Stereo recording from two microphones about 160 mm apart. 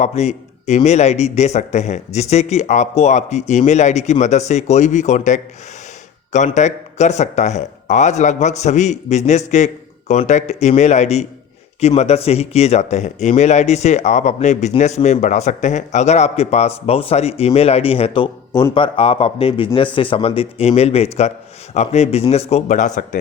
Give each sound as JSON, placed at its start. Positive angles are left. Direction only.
{"t": 0.0, "sound": "a man's voice", "side_deg": 45}